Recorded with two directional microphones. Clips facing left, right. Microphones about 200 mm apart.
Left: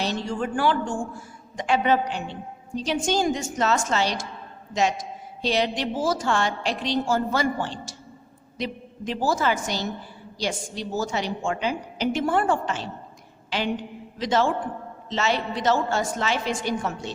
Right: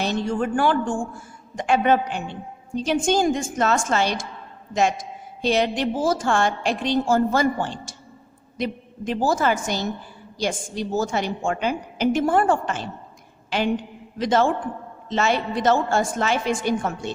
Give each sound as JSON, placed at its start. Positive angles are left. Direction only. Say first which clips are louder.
{"t": 0.0, "sound": "a woman's voice", "louder": "right 4 dB", "side_deg": -50}